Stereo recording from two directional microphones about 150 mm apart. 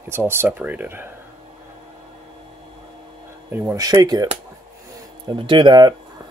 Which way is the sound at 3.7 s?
25° right (ahead or behind).